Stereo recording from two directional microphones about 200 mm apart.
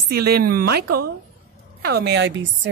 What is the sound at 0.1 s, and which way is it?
A woman's voice, 50° right (ahead or behind).